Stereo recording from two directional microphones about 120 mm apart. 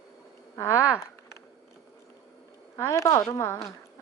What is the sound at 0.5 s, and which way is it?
Speech, 25° left (ahead or behind).